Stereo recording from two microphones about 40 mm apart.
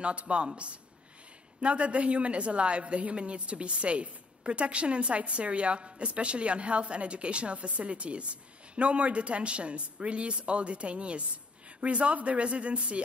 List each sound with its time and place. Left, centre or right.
0.0 s speech: right
1.6 s a man's voice: right